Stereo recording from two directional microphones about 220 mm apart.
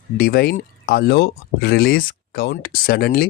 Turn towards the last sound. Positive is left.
turn(degrees=45)  # may be behind; listen again after turning